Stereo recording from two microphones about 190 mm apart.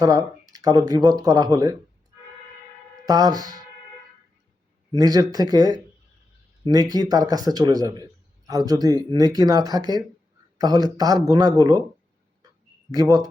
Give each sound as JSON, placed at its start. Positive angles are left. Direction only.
{"t": 0.0, "sound": "speech", "side_deg": -20}
{"t": 3.1, "sound": "speech", "side_deg": -20}
{"t": 4.9, "sound": "speech", "side_deg": -20}
{"t": 12.9, "sound": "speech", "side_deg": -20}